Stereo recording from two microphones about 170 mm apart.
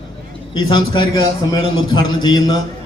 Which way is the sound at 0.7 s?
25° left (ahead or behind).